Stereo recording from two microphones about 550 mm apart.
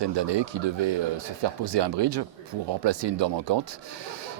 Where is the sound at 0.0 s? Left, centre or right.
Right.